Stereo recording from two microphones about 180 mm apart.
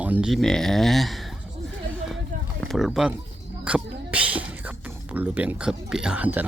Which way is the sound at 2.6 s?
Centre (ahead or behind).